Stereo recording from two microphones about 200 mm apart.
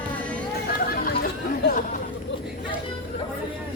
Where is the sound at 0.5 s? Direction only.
45° left (ahead or behind).